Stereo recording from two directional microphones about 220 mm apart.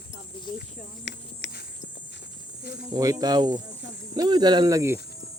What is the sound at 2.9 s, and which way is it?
Speech, 15° right (ahead or behind).